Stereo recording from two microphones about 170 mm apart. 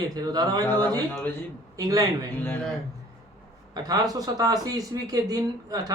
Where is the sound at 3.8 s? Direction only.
20° right (ahead or behind).